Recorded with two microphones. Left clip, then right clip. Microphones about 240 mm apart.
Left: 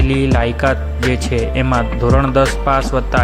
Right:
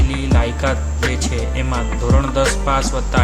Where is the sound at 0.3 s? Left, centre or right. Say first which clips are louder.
Left 4 dB; left.